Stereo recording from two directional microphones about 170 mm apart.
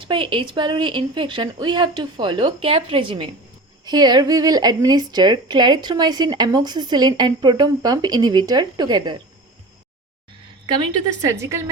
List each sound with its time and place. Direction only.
0.0 s a woman's voice: 30° right (ahead or behind)
11.3 s a woman's voice: 15° right (ahead or behind)